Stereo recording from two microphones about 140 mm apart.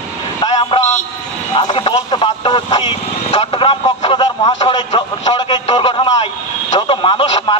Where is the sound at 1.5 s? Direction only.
35° left (ahead or behind).